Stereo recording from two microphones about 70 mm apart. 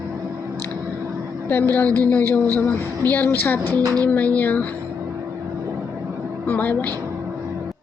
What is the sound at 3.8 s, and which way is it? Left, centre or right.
Speech, right.